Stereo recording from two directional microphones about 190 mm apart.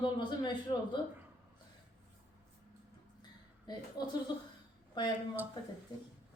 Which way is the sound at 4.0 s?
20° left (ahead or behind).